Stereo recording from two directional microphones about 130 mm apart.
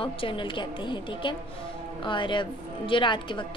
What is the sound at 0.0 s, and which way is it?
A woman's voice, 40° left (ahead or behind).